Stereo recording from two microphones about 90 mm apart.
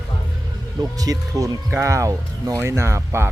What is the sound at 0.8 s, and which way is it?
Speech, 45° right (ahead or behind).